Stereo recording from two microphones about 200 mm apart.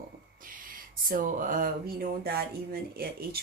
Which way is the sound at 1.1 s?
45° right (ahead or behind).